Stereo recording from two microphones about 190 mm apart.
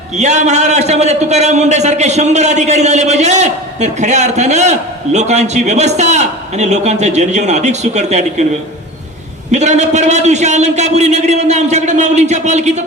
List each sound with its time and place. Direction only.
0.2 s a man's voice: 35° right (ahead or behind)
9.5 s a man's voice: 35° right (ahead or behind)